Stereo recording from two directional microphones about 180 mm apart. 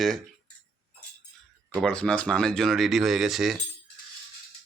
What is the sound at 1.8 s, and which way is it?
Speech, 5° left (ahead or behind).